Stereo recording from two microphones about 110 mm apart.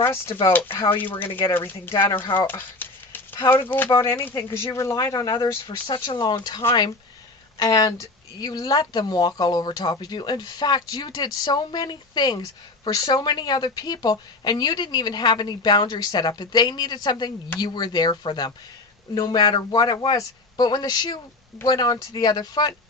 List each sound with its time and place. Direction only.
0.0 s speech: 25° left (ahead or behind)
2.5 s a sound: 15° left (ahead or behind)
4.0 s speech: 20° left (ahead or behind)